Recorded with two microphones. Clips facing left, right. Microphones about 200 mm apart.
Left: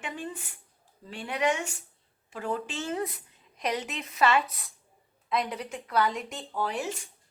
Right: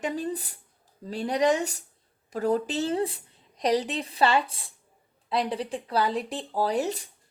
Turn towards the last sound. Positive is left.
turn(degrees=-35)  # may be behind; listen again after turning